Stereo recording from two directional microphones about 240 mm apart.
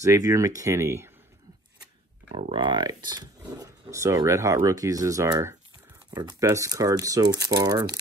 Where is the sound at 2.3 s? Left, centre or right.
Right.